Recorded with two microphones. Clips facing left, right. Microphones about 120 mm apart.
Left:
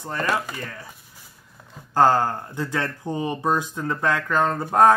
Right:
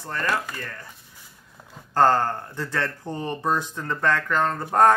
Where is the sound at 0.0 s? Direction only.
15° left (ahead or behind).